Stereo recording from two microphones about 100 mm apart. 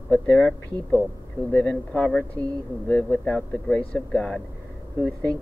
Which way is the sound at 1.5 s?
15° left (ahead or behind).